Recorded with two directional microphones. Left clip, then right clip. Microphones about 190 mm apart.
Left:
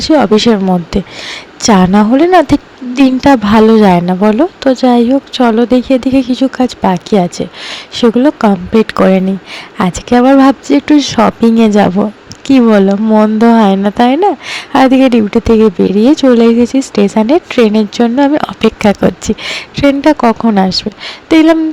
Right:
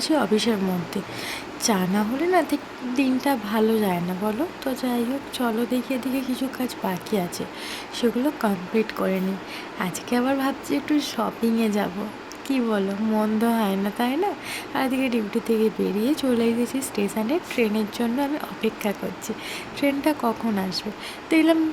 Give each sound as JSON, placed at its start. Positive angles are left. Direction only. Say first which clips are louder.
{"t": 0.0, "sound": "speech", "louder": "left 14 dB", "side_deg": 45}